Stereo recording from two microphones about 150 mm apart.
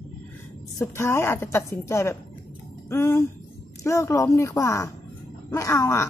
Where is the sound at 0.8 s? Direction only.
15° left (ahead or behind).